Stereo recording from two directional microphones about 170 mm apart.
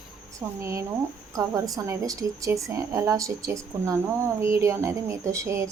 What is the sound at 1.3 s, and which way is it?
A woman's voice, 20° right (ahead or behind).